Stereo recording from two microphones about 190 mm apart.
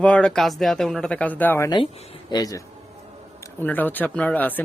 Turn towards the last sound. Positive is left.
turn(degrees=10)  # may be behind; listen again after turning